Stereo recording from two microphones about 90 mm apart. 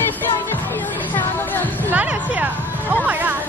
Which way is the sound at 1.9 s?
20° right (ahead or behind).